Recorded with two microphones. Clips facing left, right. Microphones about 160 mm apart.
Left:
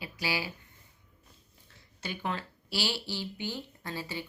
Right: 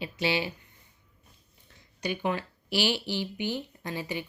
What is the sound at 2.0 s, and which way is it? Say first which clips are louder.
Speech: right 6 dB; 15° right (ahead or behind).